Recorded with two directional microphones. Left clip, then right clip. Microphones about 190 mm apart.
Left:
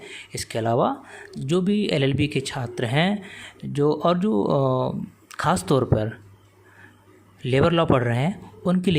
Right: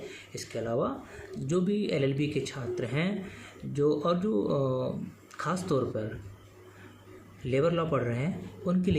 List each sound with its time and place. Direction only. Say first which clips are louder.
0.1 s speech: left 8 dB; 50° left (ahead or behind)
7.4 s speech: left 8 dB; 55° left (ahead or behind)